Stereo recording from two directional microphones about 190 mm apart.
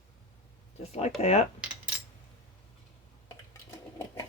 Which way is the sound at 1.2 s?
35° left (ahead or behind).